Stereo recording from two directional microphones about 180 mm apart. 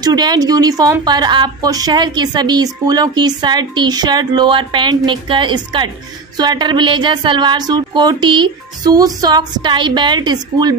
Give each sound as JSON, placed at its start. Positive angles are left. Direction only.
{"t": 0.0, "sound": "a woman's voice", "side_deg": -20}